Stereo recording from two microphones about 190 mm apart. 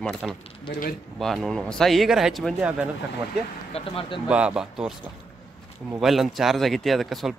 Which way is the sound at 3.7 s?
30° left (ahead or behind).